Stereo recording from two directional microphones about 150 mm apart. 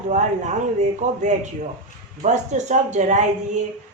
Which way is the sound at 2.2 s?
50° right (ahead or behind).